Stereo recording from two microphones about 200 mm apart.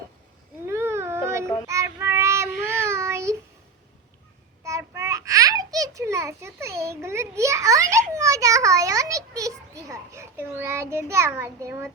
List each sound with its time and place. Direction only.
0.6 s baby cry: 10° right (ahead or behind)
1.6 s child singing: 15° right (ahead or behind)
4.6 s a sound: 15° right (ahead or behind)